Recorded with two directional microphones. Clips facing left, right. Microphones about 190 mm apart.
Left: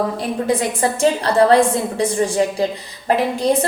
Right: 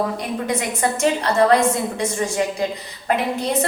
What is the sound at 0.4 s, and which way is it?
A woman's voice, 30° left (ahead or behind).